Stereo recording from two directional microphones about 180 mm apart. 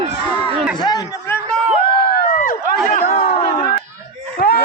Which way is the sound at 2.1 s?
50° left (ahead or behind).